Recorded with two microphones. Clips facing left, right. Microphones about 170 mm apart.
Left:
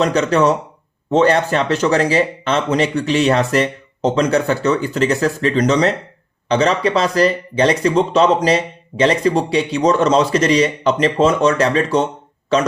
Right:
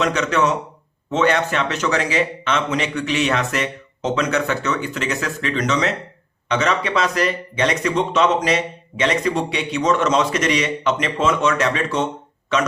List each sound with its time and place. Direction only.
0.0 s speech: 35° left (ahead or behind)